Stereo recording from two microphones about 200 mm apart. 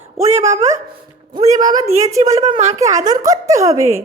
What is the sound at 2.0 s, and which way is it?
Speech, 15° right (ahead or behind).